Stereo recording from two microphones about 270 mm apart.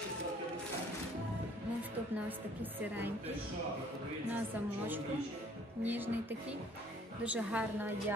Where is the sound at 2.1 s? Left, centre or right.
Centre.